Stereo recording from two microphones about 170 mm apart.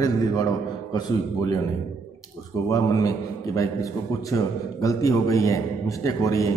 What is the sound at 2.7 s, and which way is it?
A man's voice, 20° left (ahead or behind).